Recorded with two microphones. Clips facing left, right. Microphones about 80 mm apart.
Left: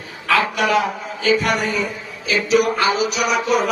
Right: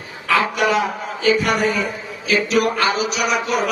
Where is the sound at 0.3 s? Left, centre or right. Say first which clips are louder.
Even; centre.